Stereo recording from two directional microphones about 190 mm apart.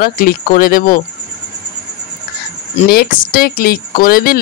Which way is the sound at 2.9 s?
50° left (ahead or behind).